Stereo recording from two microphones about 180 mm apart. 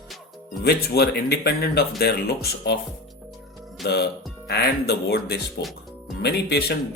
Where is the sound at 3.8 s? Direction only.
65° left (ahead or behind).